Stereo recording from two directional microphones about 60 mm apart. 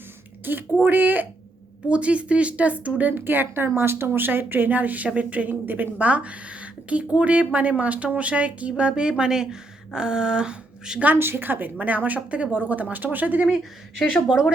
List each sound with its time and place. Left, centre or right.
0.4 s speech: right
1.9 s speech: right
11.0 s speech: right
14.3 s speech: centre